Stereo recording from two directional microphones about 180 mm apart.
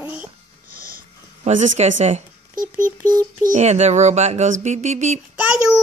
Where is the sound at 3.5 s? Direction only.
40° right (ahead or behind).